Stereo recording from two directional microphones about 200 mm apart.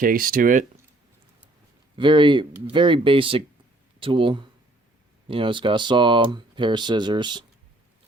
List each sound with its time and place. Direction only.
0.0 s speech: 45° right (ahead or behind)
2.0 s speech: 25° right (ahead or behind)